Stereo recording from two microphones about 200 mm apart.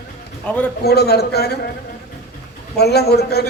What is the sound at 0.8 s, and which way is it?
Speech, 55° left (ahead or behind).